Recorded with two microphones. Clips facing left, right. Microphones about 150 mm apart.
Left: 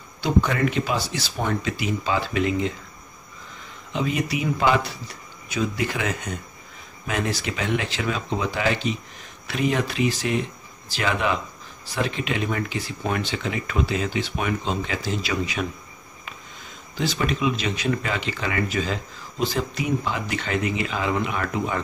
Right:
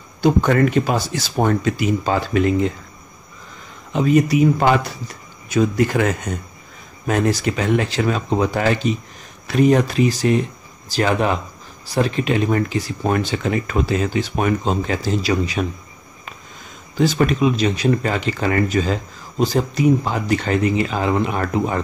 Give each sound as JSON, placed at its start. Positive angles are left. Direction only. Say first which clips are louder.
{"t": 0.2, "sound": "speech", "louder": "right 6 dB", "side_deg": -45}
{"t": 3.9, "sound": "speech", "louder": "right 9 dB", "side_deg": -45}
{"t": 16.9, "sound": "speech", "louder": "right 8 dB", "side_deg": -45}